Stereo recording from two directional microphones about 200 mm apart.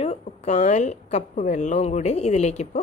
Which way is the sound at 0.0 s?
35° left (ahead or behind).